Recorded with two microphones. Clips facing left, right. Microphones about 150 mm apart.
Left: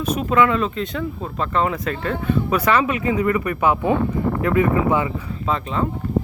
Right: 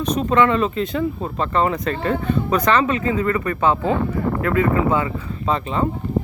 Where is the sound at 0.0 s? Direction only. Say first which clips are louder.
Right 1 dB; 5° left (ahead or behind).